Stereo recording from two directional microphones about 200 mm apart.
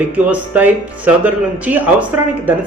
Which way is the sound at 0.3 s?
5° right (ahead or behind).